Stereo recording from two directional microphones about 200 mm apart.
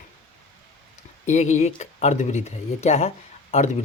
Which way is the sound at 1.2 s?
35° left (ahead or behind).